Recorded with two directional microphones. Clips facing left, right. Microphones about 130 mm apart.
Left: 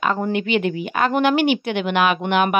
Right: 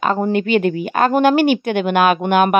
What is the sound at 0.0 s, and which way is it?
Speech, 35° right (ahead or behind).